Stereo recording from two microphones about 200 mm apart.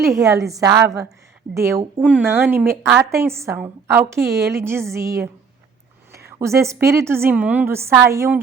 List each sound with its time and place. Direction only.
0.0 s a woman's voice: 15° right (ahead or behind)